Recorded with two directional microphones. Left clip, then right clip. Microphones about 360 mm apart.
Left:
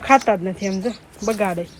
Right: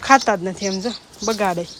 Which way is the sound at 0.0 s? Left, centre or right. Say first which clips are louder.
Right 1 dB; centre.